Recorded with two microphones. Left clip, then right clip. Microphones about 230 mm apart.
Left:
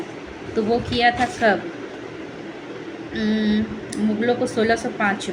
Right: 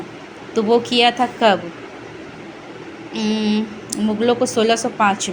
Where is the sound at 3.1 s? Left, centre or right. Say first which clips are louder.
Right 2 dB; centre.